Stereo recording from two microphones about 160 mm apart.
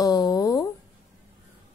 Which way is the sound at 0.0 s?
25° left (ahead or behind).